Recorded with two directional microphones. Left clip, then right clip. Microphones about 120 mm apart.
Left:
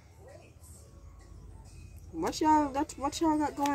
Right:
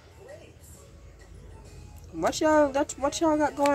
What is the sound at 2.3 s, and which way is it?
Speech, 20° right (ahead or behind).